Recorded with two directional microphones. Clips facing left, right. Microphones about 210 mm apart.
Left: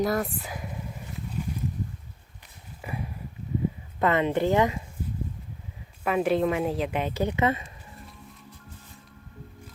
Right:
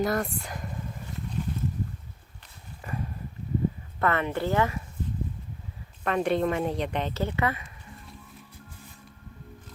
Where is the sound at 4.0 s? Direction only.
20° left (ahead or behind).